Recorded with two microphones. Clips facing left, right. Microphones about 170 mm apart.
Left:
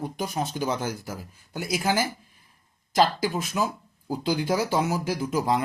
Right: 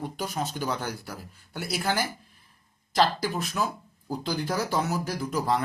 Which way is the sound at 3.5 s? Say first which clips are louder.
Left 2 dB; 10° left (ahead or behind).